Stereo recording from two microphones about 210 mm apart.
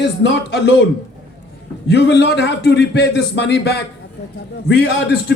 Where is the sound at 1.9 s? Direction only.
55° left (ahead or behind).